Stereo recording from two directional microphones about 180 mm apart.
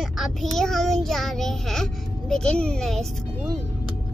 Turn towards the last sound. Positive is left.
turn(degrees=0)  # may be behind; listen again after turning